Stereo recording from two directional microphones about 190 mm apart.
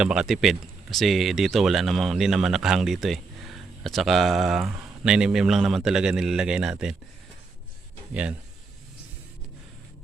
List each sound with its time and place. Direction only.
0.0 s speech: 5° right (ahead or behind)
8.1 s speech: 5° right (ahead or behind)